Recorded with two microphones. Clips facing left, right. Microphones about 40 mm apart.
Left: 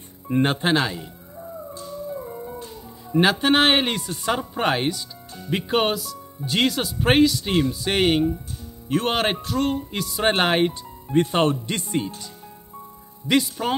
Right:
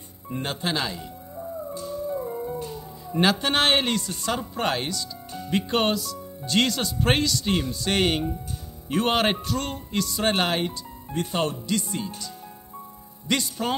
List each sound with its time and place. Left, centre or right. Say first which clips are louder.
0.3 s speech: left 8 dB; left
0.7 s speech: left 5 dB; left
3.1 s speech: left 4 dB; centre
5.5 s speech: left 2 dB; centre
10.2 s speech: left 6 dB; left
13.3 s speech: left 4 dB; centre